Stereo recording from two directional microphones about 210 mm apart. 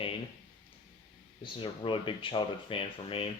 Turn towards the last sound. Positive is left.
turn(degrees=25)  # may be behind; listen again after turning